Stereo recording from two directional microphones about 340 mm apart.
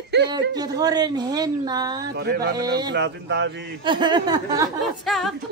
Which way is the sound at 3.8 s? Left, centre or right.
Centre.